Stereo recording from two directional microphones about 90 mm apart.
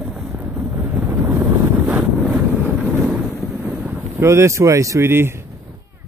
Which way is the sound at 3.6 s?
20° right (ahead or behind).